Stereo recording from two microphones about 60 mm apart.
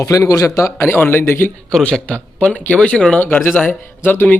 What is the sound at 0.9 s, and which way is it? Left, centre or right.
Speech, left.